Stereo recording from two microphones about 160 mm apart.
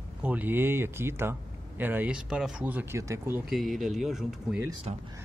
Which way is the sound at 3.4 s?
Centre (ahead or behind).